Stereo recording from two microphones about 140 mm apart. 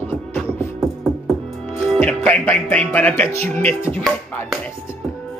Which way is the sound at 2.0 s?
10° left (ahead or behind).